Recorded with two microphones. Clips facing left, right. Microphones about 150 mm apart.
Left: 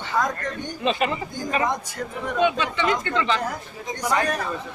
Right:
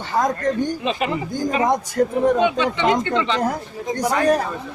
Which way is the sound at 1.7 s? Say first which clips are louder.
Right 10 dB; 40° right (ahead or behind).